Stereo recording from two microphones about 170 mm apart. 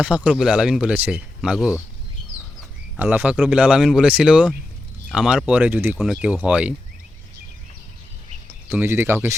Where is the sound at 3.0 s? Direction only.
10° right (ahead or behind).